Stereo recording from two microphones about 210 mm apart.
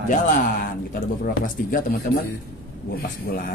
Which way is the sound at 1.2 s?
40° left (ahead or behind).